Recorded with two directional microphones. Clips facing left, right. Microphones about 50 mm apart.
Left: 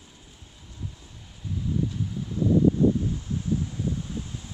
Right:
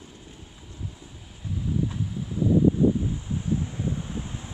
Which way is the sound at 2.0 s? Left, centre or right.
Centre.